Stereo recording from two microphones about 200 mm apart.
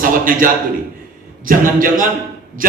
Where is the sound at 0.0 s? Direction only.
45° right (ahead or behind).